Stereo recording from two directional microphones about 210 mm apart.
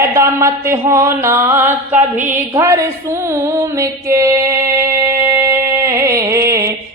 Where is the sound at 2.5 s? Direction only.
15° right (ahead or behind).